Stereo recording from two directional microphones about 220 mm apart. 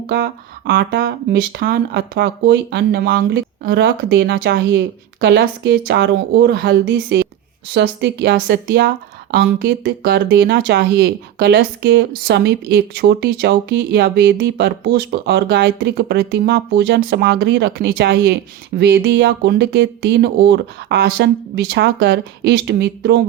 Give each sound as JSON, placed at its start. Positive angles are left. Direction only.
{"t": 0.1, "sound": "speech", "side_deg": -50}